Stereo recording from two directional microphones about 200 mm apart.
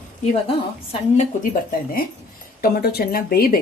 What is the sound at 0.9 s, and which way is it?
A woman's voice, 40° left (ahead or behind).